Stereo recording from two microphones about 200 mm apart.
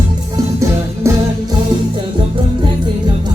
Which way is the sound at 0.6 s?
15° right (ahead or behind).